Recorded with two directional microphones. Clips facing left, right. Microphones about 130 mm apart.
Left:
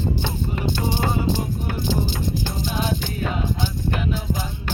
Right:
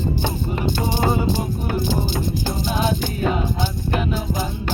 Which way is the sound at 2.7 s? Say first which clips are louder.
Right 3 dB; 10° right (ahead or behind).